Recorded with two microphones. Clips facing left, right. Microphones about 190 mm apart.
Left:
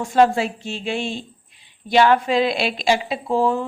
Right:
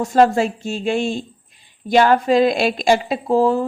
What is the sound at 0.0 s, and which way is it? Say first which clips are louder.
A woman's voice: right 2 dB; 40° right (ahead or behind).